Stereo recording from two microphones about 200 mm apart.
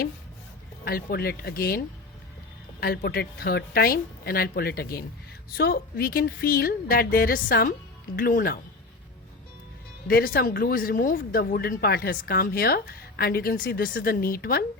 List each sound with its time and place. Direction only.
0.9 s speech: 50° left (ahead or behind)
2.8 s speech: 50° left (ahead or behind)
10.1 s speech: 45° left (ahead or behind)